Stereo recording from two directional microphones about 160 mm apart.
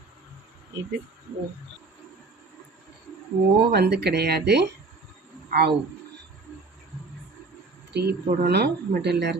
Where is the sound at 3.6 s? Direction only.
90° right.